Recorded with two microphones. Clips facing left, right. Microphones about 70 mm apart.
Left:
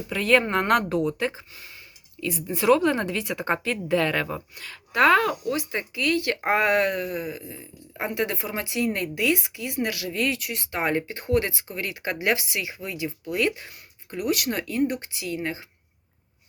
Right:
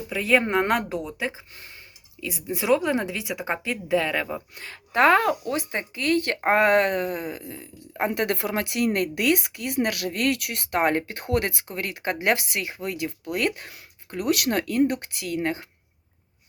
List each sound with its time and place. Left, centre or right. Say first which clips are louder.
0.1 s speech: even; centre
4.5 s speech: right 1 dB; right